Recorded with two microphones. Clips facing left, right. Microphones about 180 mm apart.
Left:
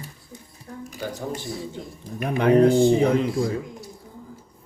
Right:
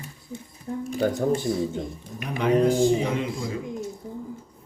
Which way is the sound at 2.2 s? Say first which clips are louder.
Left 4 dB; 55° left (ahead or behind).